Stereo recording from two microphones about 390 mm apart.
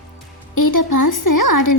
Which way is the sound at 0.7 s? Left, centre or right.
Left.